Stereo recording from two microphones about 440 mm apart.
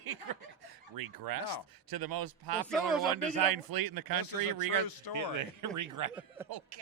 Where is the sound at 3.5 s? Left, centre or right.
Right.